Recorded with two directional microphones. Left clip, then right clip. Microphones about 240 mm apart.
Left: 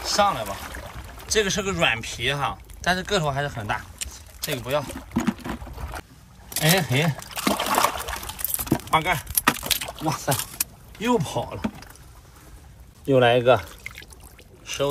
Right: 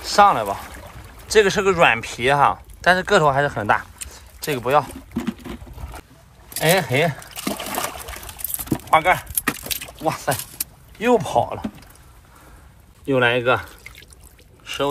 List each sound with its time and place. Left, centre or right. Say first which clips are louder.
0.0 s speech: right 7 dB; centre
5.1 s a sound: left 3 dB; left
5.8 s boat: left 3 dB; centre
6.5 s a sound: right 4 dB; centre
10.2 s speech: right 2 dB; centre
13.0 s speech: even; centre